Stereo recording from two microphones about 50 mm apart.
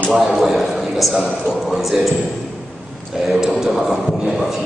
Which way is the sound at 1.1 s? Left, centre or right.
Centre.